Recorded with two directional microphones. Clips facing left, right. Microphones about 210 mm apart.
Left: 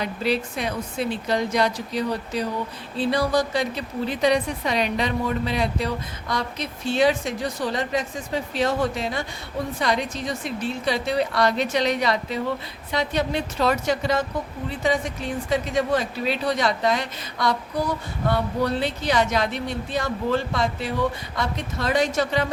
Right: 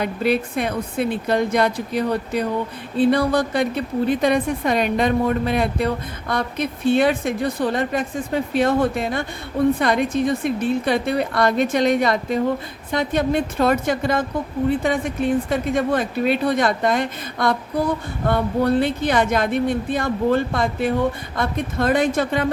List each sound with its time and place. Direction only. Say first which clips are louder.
0.0 s a woman's voice: right 4 dB; 55° right (ahead or behind)